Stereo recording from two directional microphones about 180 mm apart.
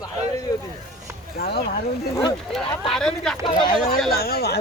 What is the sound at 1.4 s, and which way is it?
Speech, 65° left (ahead or behind).